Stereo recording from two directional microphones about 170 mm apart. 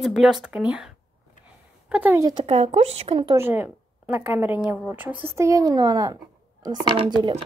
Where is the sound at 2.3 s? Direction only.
35° right (ahead or behind).